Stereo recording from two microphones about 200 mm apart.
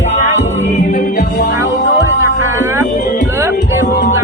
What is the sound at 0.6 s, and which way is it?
Music, 40° left (ahead or behind).